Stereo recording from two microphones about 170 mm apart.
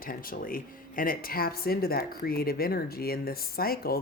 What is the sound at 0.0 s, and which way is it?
Speech, 55° left (ahead or behind).